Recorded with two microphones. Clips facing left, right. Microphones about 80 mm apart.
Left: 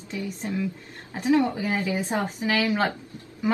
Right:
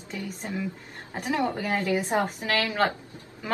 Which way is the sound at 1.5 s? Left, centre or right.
Centre.